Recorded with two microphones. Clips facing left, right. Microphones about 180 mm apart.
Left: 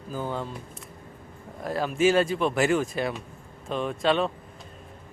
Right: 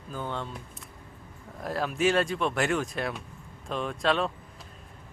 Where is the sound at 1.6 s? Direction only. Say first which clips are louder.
Left 3 dB; centre (ahead or behind).